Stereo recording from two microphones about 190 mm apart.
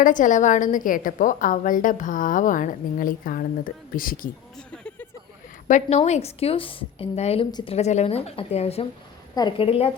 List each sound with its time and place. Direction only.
0.0 s a woman's voice: 45° left (ahead or behind)
4.5 s a sound: 5° left (ahead or behind)
5.6 s a woman's voice: 40° left (ahead or behind)